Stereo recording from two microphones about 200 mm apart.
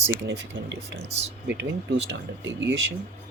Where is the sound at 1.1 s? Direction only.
30° right (ahead or behind).